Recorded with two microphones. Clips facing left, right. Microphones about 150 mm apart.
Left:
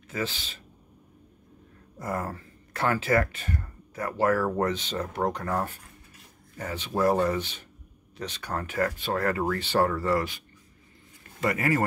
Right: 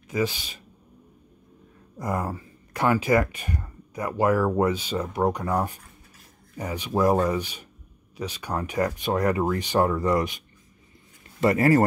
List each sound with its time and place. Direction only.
0.1 s speech: 15° right (ahead or behind)
2.0 s speech: 15° right (ahead or behind)
11.4 s speech: 35° right (ahead or behind)